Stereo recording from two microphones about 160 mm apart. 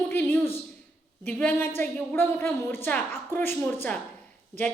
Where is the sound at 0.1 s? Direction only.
15° left (ahead or behind).